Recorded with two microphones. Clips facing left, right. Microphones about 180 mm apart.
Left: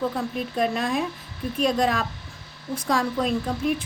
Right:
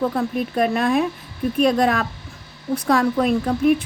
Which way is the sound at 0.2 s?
55° right (ahead or behind).